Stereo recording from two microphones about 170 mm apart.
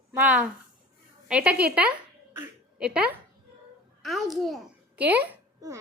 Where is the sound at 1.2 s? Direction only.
5° right (ahead or behind).